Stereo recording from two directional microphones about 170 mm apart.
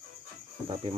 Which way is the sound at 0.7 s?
30° right (ahead or behind).